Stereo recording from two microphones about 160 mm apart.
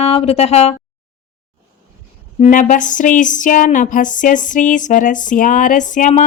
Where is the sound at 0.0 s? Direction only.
40° left (ahead or behind).